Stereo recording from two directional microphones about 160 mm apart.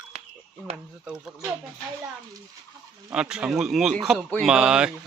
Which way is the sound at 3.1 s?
5° right (ahead or behind).